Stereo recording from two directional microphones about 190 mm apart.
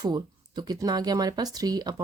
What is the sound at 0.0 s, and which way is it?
Speech, 20° right (ahead or behind).